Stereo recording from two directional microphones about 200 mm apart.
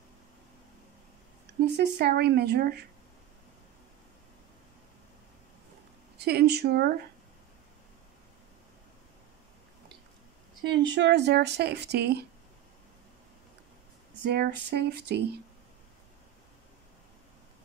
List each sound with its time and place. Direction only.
1.8 s speech: 55° right (ahead or behind)
6.1 s speech: 55° right (ahead or behind)
10.7 s speech: 60° right (ahead or behind)
14.2 s speech: 55° right (ahead or behind)